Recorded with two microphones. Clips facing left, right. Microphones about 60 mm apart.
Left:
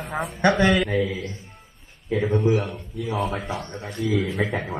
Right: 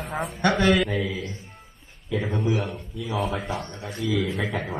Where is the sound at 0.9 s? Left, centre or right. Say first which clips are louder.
Left 4 dB; centre.